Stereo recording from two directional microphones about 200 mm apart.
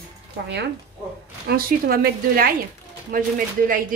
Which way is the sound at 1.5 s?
50° right (ahead or behind).